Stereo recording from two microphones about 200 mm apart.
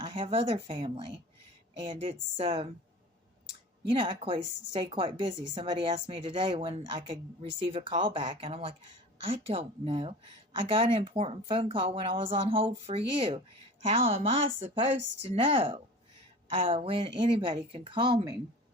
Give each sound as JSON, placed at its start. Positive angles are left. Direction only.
{"t": 0.0, "sound": "a woman's voice", "side_deg": -25}
{"t": 3.8, "sound": "a woman's voice", "side_deg": -25}
{"t": 14.4, "sound": "speech", "side_deg": -70}
{"t": 15.4, "sound": "a woman's voice", "side_deg": -25}